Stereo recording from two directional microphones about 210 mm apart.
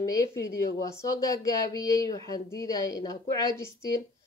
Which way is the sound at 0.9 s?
15° left (ahead or behind).